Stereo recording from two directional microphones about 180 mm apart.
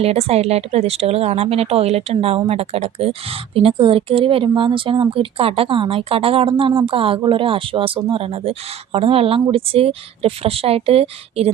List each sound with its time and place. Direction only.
0.0 s a woman's voice: 35° right (ahead or behind)